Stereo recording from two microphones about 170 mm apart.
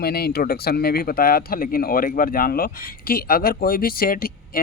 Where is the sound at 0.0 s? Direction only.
65° left (ahead or behind).